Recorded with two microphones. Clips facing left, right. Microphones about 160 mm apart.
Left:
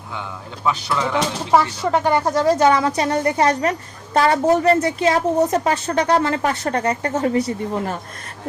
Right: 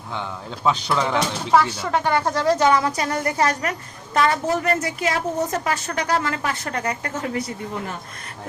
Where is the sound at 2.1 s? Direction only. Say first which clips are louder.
Left 3 dB; 20° left (ahead or behind).